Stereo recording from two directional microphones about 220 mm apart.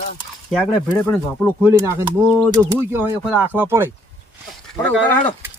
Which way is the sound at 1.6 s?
10° right (ahead or behind).